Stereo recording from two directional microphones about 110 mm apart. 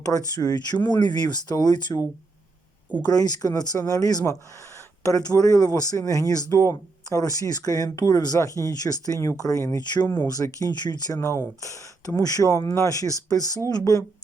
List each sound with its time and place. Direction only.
0.0 s speech: 35° left (ahead or behind)
3.1 s speech: 35° left (ahead or behind)